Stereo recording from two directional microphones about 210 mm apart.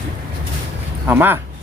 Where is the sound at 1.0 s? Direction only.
10° right (ahead or behind).